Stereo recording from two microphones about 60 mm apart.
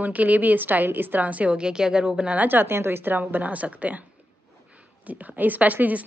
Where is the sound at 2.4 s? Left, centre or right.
Right.